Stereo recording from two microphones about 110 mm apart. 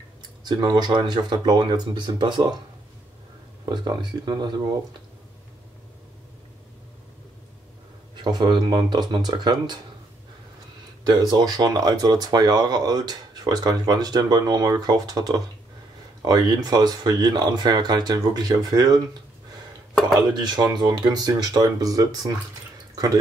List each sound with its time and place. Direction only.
0.4 s speech: 40° right (ahead or behind)
3.6 s speech: 40° right (ahead or behind)
8.2 s speech: 40° right (ahead or behind)
11.1 s speech: 35° right (ahead or behind)
19.9 s a sound: centre (ahead or behind)
20.2 s speech: 40° right (ahead or behind)